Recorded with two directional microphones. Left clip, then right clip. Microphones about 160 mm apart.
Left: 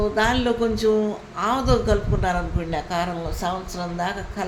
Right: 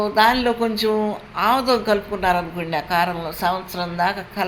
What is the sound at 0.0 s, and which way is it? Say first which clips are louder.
A man's voice: right 5 dB; 10° right (ahead or behind).